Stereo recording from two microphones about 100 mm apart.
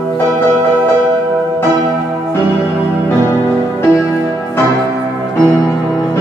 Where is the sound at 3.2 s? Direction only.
25° left (ahead or behind).